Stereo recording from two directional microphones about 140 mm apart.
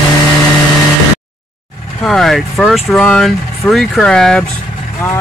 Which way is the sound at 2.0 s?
5° left (ahead or behind).